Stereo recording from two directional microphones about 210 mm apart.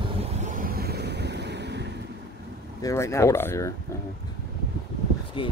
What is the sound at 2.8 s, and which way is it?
Speech, 15° left (ahead or behind).